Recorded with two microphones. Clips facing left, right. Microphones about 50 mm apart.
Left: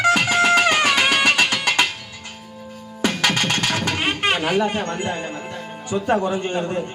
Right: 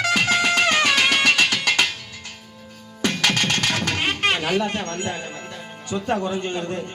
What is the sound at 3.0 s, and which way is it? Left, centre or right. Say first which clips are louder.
Music: left 1 dB; centre.